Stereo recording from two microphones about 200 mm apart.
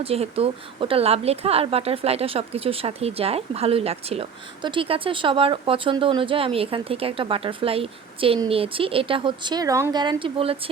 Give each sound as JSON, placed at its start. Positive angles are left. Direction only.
{"t": 0.0, "sound": "speech", "side_deg": -30}